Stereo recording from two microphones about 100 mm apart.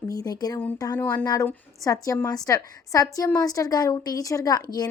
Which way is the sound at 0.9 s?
20° left (ahead or behind).